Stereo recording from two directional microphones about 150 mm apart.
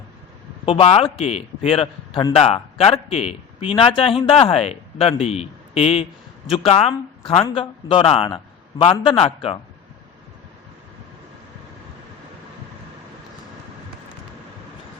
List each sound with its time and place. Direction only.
0.6 s a man's voice: 35° left (ahead or behind)